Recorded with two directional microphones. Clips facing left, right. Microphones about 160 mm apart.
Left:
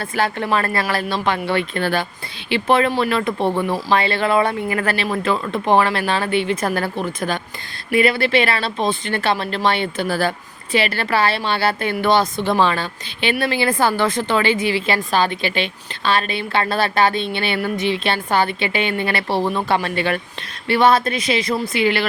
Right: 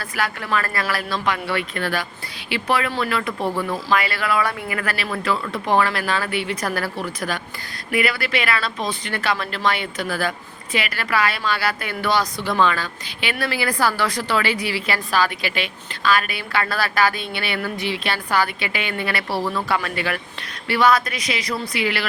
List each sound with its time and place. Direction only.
0.0 s a woman's voice: 25° left (ahead or behind)